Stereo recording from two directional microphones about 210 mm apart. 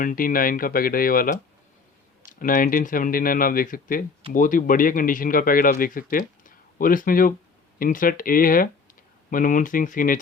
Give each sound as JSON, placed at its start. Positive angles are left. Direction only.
{"t": 0.0, "sound": "a man's voice", "side_deg": 40}